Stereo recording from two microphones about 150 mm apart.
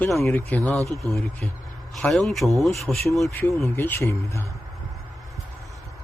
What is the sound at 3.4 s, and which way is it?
Speech, 15° left (ahead or behind).